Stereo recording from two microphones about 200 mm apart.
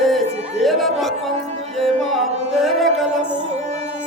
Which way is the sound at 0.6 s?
Centre (ahead or behind).